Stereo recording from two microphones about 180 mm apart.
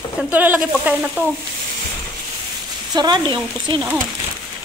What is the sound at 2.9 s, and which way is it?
Speech, 25° right (ahead or behind).